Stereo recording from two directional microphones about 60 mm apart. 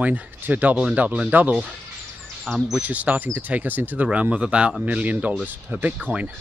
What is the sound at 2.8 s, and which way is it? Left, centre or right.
Speech, right.